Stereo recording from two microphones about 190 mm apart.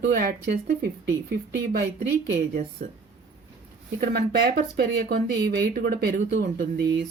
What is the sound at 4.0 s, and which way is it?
Speech, 55° right (ahead or behind).